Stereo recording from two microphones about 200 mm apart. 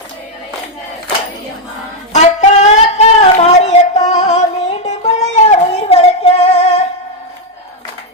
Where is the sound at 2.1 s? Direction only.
35° left (ahead or behind).